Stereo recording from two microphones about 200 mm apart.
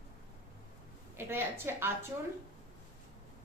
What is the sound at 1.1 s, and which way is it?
Speech, 10° right (ahead or behind).